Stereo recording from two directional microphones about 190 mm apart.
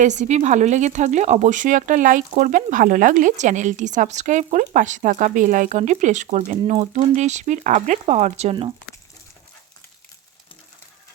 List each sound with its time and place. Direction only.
0.0 s a woman's voice: 40° right (ahead or behind)